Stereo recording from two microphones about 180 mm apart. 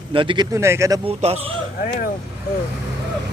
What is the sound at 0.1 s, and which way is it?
Speech, 30° right (ahead or behind).